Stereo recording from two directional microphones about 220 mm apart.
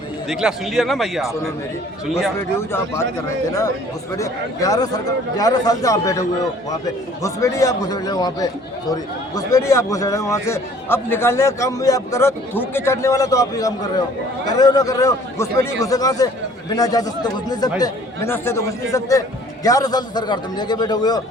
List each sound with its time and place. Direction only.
0.3 s speech: centre (ahead or behind)
2.7 s a man's voice: 10° left (ahead or behind)